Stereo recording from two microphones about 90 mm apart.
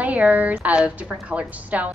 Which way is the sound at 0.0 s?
15° right (ahead or behind).